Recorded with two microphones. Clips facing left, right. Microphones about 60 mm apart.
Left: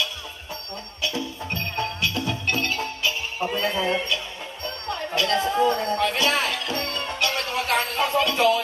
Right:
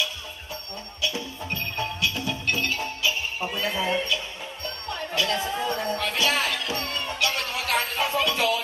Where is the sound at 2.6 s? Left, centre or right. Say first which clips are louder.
Left 1 dB; left.